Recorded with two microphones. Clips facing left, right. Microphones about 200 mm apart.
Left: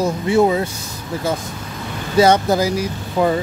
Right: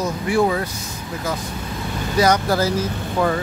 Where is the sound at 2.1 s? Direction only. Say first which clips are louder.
Left 4 dB; 25° left (ahead or behind).